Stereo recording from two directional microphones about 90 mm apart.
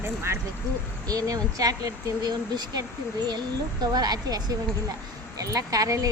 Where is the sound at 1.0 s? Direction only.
45° right (ahead or behind).